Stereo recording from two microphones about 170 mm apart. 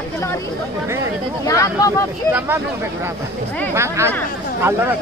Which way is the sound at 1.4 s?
20° left (ahead or behind).